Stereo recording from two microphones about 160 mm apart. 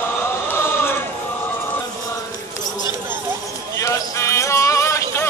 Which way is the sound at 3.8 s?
20° left (ahead or behind).